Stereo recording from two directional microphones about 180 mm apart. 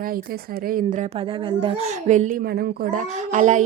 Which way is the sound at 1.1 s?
25° right (ahead or behind).